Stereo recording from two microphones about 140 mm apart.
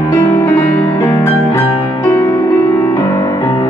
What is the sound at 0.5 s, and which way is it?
Music, 25° left (ahead or behind).